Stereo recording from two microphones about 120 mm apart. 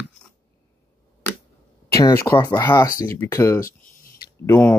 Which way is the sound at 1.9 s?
25° left (ahead or behind).